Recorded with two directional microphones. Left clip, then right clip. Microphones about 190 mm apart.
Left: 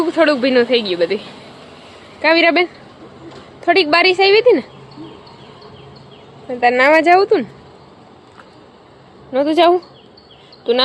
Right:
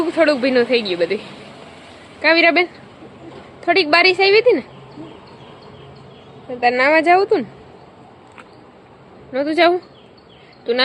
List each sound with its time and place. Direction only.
0.2 s speech: 15° left (ahead or behind)
2.2 s a woman's voice: 15° left (ahead or behind)
6.5 s a woman's voice: 20° left (ahead or behind)
9.3 s a woman's voice: 25° left (ahead or behind)